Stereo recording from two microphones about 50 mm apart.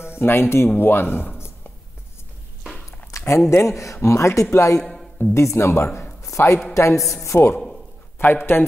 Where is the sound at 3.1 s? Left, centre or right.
Left.